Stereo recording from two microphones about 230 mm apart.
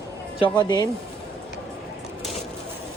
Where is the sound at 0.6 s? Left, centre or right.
Centre.